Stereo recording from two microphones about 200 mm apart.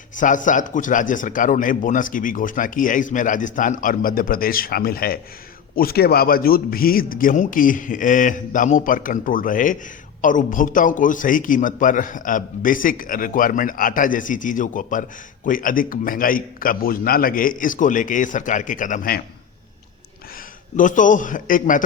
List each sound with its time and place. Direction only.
0.2 s a man's voice: 40° left (ahead or behind)
20.7 s a man's voice: 40° left (ahead or behind)